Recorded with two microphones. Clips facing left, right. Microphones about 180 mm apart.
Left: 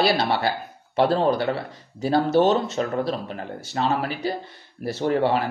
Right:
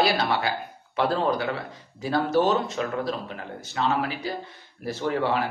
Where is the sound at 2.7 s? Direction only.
40° left (ahead or behind).